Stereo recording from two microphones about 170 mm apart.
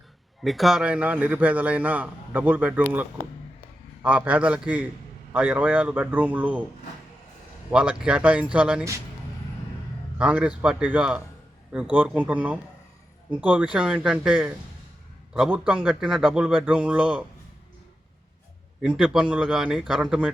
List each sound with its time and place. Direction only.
0.4 s a man's voice: centre (ahead or behind)
7.7 s a man's voice: 5° right (ahead or behind)
10.2 s a man's voice: 5° right (ahead or behind)
18.8 s a man's voice: 5° right (ahead or behind)